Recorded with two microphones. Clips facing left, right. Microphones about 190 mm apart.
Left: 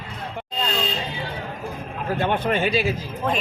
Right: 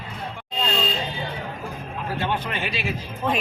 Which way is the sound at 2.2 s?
50° left (ahead or behind).